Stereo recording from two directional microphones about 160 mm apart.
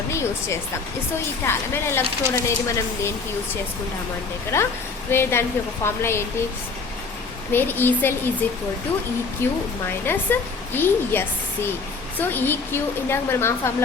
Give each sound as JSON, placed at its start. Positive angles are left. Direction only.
{"t": 0.1, "sound": "speech", "side_deg": 15}
{"t": 5.1, "sound": "speech", "side_deg": 15}
{"t": 7.5, "sound": "speech", "side_deg": 15}